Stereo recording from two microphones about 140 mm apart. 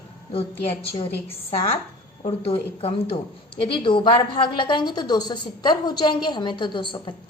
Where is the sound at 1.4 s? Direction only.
40° left (ahead or behind).